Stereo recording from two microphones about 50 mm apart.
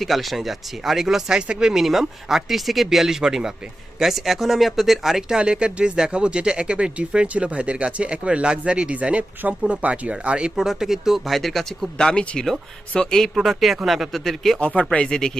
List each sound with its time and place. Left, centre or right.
0.0 s speech: centre
1.7 s speech: centre
5.4 s speech: centre
10.5 s speech: centre
11.9 s speech: centre
13.3 s speech: centre
14.6 s speech: left
14.9 s speech: centre